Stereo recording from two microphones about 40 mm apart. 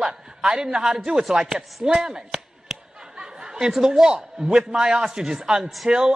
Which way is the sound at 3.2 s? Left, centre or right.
Centre.